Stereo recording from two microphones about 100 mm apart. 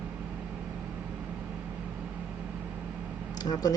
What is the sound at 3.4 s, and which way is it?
Speech, 40° left (ahead or behind).